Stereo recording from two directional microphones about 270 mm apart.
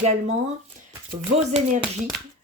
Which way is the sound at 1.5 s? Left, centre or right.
Centre.